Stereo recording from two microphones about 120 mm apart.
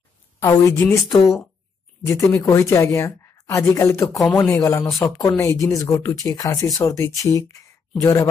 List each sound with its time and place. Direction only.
0.4 s speech: 25° left (ahead or behind)
2.0 s speech: 25° left (ahead or behind)